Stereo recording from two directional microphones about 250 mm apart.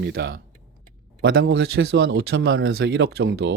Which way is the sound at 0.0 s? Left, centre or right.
Right.